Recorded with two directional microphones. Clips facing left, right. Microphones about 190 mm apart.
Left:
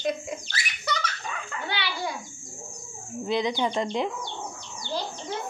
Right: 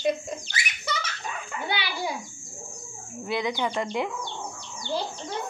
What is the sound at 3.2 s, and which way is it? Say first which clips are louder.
Speech: left 2 dB; 20° left (ahead or behind).